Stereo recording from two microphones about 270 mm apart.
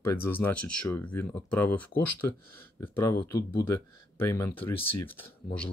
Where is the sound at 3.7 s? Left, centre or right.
Left.